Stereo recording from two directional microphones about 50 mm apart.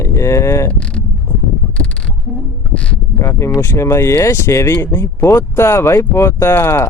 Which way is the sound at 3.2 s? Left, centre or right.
Left.